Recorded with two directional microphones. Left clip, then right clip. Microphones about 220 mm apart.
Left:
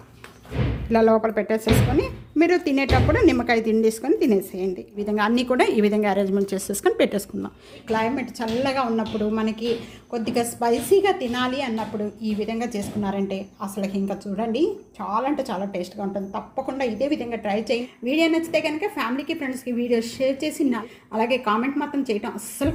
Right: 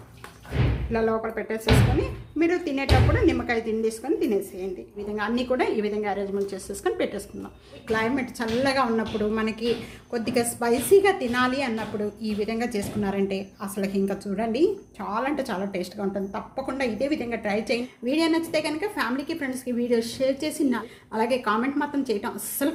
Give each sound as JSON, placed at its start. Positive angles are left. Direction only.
{"t": 0.9, "sound": "a woman's voice", "side_deg": 40}
{"t": 7.9, "sound": "a woman's voice", "side_deg": 10}
{"t": 18.0, "sound": "a woman's voice", "side_deg": 15}